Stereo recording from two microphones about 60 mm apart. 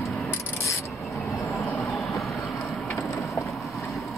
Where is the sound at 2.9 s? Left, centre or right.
Left.